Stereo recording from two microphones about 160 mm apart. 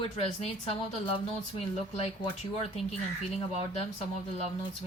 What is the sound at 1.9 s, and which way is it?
Speech, 40° left (ahead or behind).